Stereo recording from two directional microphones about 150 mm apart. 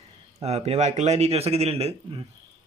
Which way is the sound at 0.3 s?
45° right (ahead or behind).